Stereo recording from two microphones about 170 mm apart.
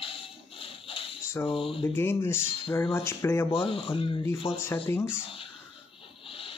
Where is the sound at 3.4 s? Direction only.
30° left (ahead or behind).